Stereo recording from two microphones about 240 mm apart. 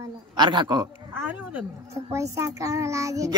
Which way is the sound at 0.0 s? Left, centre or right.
Centre.